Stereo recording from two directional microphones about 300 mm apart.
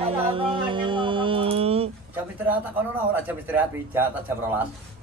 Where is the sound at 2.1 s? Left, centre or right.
Centre.